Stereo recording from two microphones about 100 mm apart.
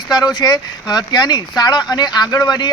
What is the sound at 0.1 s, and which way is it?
Speech, 45° left (ahead or behind).